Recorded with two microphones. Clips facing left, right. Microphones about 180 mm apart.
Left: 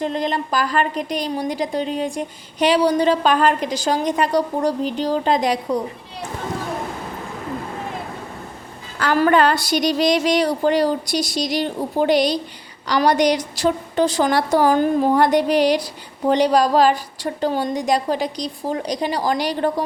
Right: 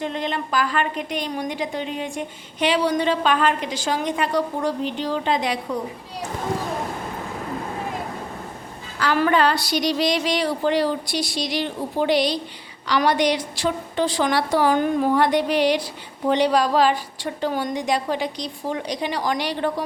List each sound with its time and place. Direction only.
0.0 s a woman's voice: 40° left (ahead or behind)
9.0 s a woman's voice: 45° left (ahead or behind)